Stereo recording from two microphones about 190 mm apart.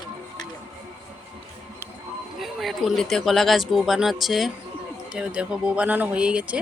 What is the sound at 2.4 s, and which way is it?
Speech, centre (ahead or behind).